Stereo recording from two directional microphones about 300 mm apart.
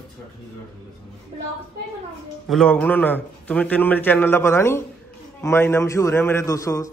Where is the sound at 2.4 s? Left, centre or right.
Centre.